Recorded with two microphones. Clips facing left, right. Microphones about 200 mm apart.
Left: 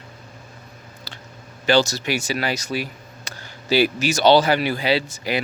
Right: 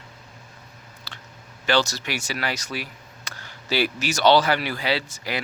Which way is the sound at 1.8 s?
10° left (ahead or behind).